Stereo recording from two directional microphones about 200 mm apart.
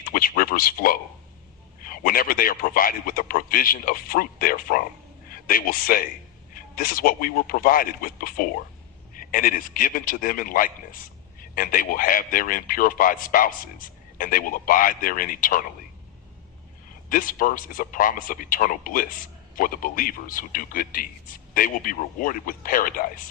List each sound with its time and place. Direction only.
0.0 s a man's voice: 45° left (ahead or behind)
17.1 s a man's voice: 45° left (ahead or behind)